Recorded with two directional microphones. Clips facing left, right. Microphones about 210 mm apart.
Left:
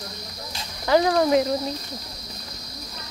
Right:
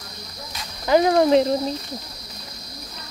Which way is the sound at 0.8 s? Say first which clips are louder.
Right 3 dB; 20° right (ahead or behind).